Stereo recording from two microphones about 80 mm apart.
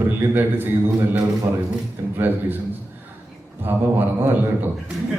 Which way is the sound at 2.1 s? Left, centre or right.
Right.